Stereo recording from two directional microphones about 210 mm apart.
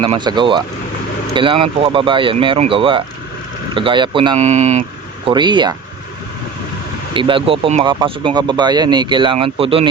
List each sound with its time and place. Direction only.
0.0 s speech: 25° right (ahead or behind)
7.1 s speech: 25° right (ahead or behind)